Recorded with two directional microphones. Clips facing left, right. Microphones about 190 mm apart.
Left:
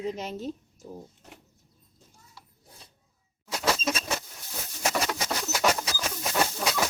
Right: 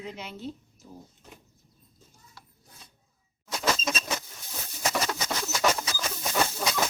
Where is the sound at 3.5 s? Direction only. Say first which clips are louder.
Left 1 dB; 10° left (ahead or behind).